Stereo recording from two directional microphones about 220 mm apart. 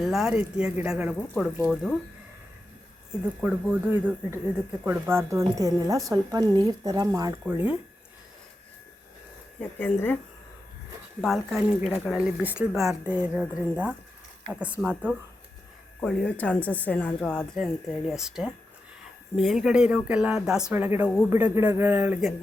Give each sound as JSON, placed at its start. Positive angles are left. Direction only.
{"t": 0.0, "sound": "speech", "side_deg": 0}
{"t": 1.3, "sound": "speech", "side_deg": 5}
{"t": 3.4, "sound": "speech", "side_deg": -5}
{"t": 9.6, "sound": "speech", "side_deg": 5}
{"t": 11.2, "sound": "speech", "side_deg": 0}
{"t": 16.0, "sound": "speech", "side_deg": 5}